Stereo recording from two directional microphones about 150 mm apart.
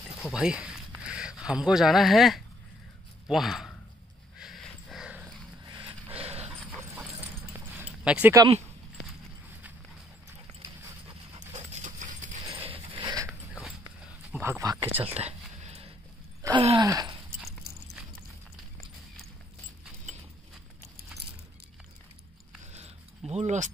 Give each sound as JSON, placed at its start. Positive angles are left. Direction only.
{"t": 0.3, "sound": "speech", "side_deg": -5}
{"t": 4.4, "sound": "dog", "side_deg": 0}
{"t": 6.1, "sound": "dog", "side_deg": -40}
{"t": 7.2, "sound": "keys jangling", "side_deg": -10}
{"t": 11.3, "sound": "dog", "side_deg": -50}
{"t": 12.6, "sound": "a sound", "side_deg": -35}
{"t": 13.3, "sound": "biting", "side_deg": -5}
{"t": 14.4, "sound": "speech", "side_deg": -20}
{"t": 15.0, "sound": "a sound", "side_deg": -45}
{"t": 16.5, "sound": "wail", "side_deg": -35}
{"t": 16.8, "sound": "a sound", "side_deg": -20}
{"t": 17.6, "sound": "a sound", "side_deg": -90}
{"t": 22.7, "sound": "zipper", "side_deg": -45}